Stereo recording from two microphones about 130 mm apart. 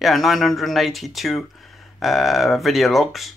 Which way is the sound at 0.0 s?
Centre (ahead or behind).